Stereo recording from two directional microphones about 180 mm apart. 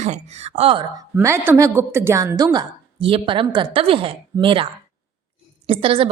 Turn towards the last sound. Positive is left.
turn(degrees=-30)  # may be behind; listen again after turning